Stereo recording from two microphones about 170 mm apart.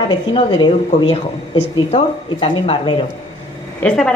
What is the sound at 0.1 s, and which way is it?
A woman's voice, 30° left (ahead or behind).